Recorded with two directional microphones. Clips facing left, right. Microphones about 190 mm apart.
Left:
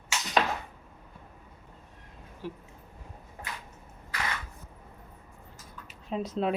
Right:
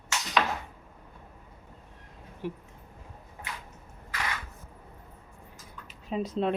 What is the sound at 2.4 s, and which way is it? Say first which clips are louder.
Speech: right 3 dB; 15° right (ahead or behind).